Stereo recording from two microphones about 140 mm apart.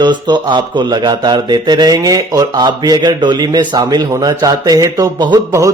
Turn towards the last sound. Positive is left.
turn(degrees=-30)  # may be behind; listen again after turning